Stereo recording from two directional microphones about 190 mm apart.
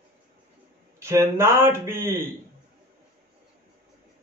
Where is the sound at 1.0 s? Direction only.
15° right (ahead or behind).